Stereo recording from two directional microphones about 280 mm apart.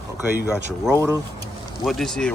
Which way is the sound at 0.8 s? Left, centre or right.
Centre.